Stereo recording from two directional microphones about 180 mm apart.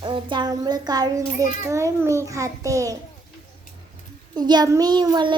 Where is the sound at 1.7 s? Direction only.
15° right (ahead or behind).